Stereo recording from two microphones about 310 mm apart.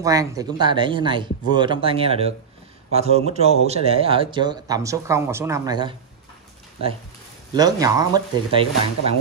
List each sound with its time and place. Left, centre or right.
0.0 s speech: centre
7.5 s speech: centre